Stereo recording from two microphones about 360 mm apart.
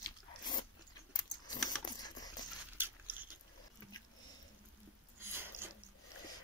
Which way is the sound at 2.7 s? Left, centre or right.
Centre.